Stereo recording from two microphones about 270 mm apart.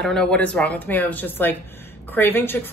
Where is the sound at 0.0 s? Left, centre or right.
Centre.